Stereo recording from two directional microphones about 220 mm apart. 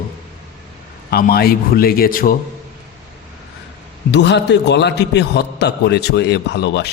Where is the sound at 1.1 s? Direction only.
45° left (ahead or behind).